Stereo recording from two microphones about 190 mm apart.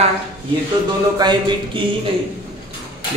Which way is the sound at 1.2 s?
25° right (ahead or behind).